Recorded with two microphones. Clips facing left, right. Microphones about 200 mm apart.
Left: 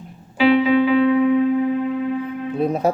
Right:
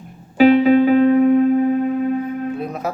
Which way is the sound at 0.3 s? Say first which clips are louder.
Right 4 dB; 45° right (ahead or behind).